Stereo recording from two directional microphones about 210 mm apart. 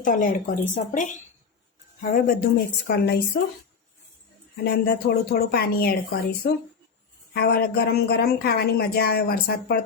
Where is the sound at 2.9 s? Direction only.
50° left (ahead or behind).